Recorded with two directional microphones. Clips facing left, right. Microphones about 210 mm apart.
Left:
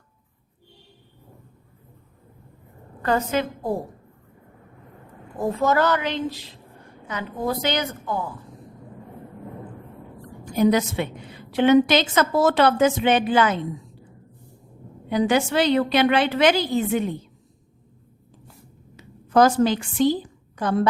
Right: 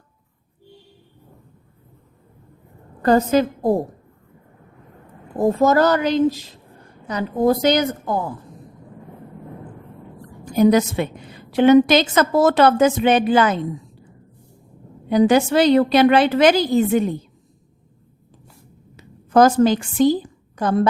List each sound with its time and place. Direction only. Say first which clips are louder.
3.0 s a woman's voice: right 7 dB; 40° right (ahead or behind)
5.4 s a woman's voice: right 5 dB; 40° right (ahead or behind)
10.5 s a woman's voice: right 4 dB; 45° right (ahead or behind)
15.1 s a woman's voice: right 5 dB; 40° right (ahead or behind)
18.9 s a woman's voice: right 3 dB; 45° right (ahead or behind)